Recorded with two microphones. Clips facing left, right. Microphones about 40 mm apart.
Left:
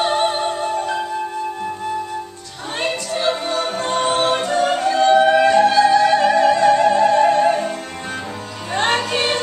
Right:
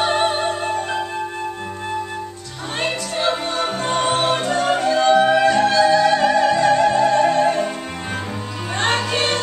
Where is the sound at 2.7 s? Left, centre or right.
Centre.